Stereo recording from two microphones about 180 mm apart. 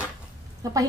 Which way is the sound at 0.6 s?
20° right (ahead or behind).